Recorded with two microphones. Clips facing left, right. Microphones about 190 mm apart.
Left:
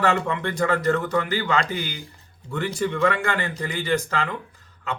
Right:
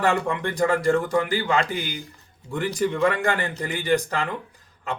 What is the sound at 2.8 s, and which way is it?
Speech, 40° right (ahead or behind).